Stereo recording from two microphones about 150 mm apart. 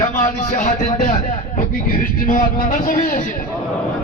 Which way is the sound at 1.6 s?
70° left (ahead or behind).